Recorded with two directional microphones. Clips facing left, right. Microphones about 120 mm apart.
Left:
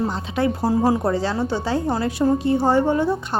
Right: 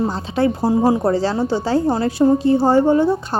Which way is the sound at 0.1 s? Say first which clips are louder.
Right 3 dB; 30° right (ahead or behind).